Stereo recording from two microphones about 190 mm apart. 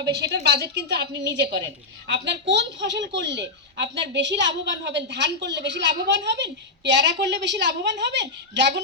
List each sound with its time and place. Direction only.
0.0 s a woman's voice: 60° right (ahead or behind)